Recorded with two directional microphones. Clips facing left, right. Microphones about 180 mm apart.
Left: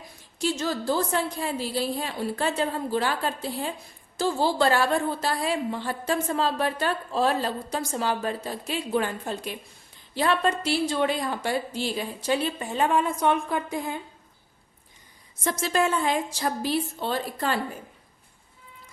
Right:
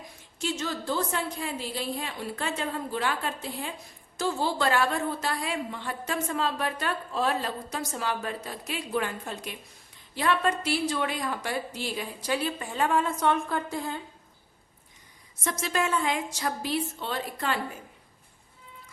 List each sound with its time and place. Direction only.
0.3 s a woman's voice: 35° left (ahead or behind); by 14.0 s 15° left (ahead or behind)
15.4 s a woman's voice: 35° left (ahead or behind)